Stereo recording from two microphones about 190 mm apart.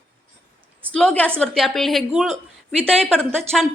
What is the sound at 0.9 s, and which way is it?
A woman's voice, 5° left (ahead or behind).